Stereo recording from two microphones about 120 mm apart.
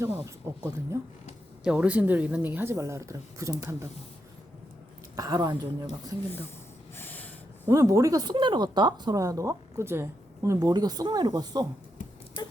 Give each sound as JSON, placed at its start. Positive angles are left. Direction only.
{"t": 0.0, "sound": "speech", "side_deg": -20}
{"t": 1.6, "sound": "speech", "side_deg": -10}
{"t": 5.1, "sound": "speech", "side_deg": -30}
{"t": 6.9, "sound": "a sound", "side_deg": 15}
{"t": 7.7, "sound": "speech", "side_deg": -25}